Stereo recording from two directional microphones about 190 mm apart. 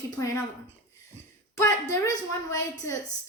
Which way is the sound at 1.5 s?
15° left (ahead or behind).